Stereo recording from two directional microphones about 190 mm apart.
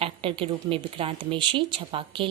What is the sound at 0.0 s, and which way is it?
Speech, 30° right (ahead or behind).